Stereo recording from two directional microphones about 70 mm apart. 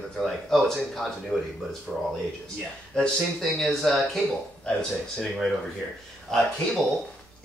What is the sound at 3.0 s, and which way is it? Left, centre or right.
Speech, centre.